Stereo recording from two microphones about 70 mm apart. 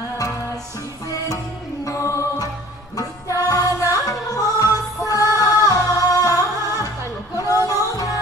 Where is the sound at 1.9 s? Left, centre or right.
Left.